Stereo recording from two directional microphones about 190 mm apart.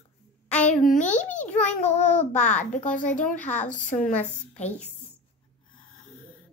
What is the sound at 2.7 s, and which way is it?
Speech, 45° left (ahead or behind).